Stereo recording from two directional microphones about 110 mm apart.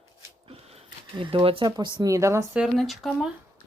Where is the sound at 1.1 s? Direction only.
50° right (ahead or behind).